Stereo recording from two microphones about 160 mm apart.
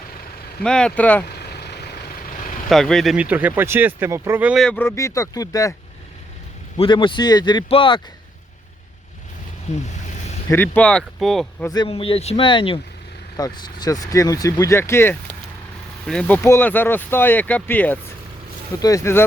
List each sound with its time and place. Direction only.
0.6 s speech: 5° left (ahead or behind)
1.4 s vehicle: 90° left
2.6 s speech: centre (ahead or behind)
4.6 s speech: 10° left (ahead or behind)
6.7 s speech: 30° left (ahead or behind)
9.7 s a sound: 45° left (ahead or behind)
10.5 s speech: 10° left (ahead or behind)
11.7 s speech: 30° left (ahead or behind)